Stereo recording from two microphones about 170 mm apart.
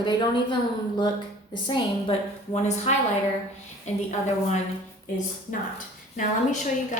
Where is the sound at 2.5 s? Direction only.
40° left (ahead or behind).